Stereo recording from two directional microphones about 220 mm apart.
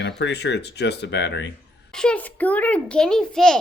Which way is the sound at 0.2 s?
50° left (ahead or behind).